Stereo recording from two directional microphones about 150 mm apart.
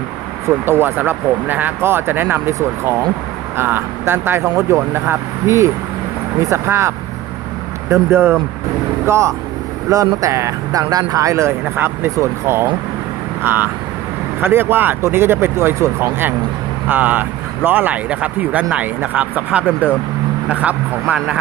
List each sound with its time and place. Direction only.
0.4 s speech: 15° right (ahead or behind)